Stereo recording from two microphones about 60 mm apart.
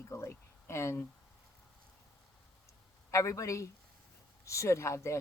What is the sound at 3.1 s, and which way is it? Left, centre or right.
A woman's voice, left.